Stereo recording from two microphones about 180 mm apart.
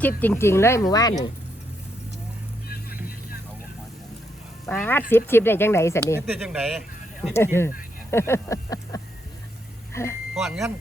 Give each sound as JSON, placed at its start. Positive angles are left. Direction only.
{"t": 0.2, "sound": "speech", "side_deg": 10}
{"t": 4.6, "sound": "speech", "side_deg": 10}
{"t": 6.2, "sound": "speech", "side_deg": 0}
{"t": 7.3, "sound": "speech", "side_deg": 15}
{"t": 10.3, "sound": "speech", "side_deg": 0}